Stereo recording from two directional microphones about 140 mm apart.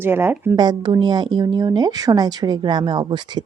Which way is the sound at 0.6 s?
30° right (ahead or behind).